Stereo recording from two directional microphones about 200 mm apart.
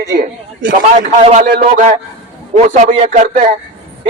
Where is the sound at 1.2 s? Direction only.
30° right (ahead or behind).